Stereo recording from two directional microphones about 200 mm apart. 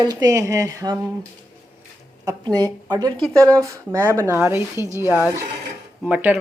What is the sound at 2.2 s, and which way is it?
A woman's voice, 20° right (ahead or behind).